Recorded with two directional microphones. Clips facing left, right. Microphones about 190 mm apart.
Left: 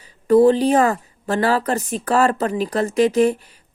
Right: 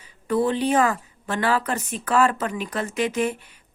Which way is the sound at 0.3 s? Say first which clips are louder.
Left 8 dB; 35° left (ahead or behind).